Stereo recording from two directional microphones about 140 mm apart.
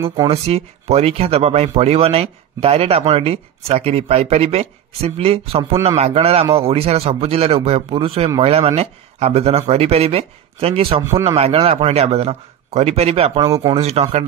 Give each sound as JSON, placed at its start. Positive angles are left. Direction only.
{"t": 0.3, "sound": "speech", "side_deg": -45}
{"t": 11.0, "sound": "a man's voice", "side_deg": -20}
{"t": 11.3, "sound": "speech", "side_deg": -45}
{"t": 13.5, "sound": "a man's voice", "side_deg": -30}
{"t": 13.7, "sound": "speech", "side_deg": -50}